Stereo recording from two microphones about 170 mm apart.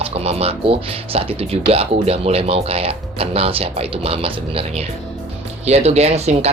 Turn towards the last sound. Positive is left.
turn(degrees=-40)  # may be behind; listen again after turning